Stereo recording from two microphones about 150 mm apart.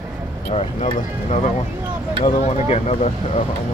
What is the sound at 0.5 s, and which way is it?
Speech, 45° left (ahead or behind).